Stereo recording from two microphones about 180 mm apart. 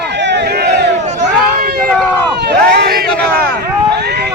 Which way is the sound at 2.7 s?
65° right (ahead or behind).